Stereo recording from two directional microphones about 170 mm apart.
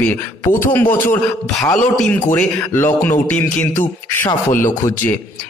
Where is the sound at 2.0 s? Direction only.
10° left (ahead or behind).